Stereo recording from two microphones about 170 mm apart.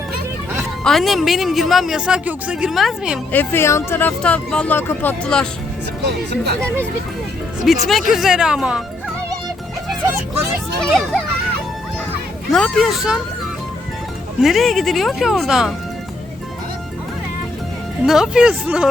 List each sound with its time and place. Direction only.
0.9 s a woman's voice: centre (ahead or behind)
3.3 s speech: 15° left (ahead or behind)
6.0 s speech: 75° right (ahead or behind)
7.9 s a woman's voice: centre (ahead or behind)
10.8 s a woman's voice: 5° left (ahead or behind)
12.5 s a woman's voice: centre (ahead or behind)
14.4 s a woman's voice: centre (ahead or behind)
18.0 s a woman's voice: 5° right (ahead or behind)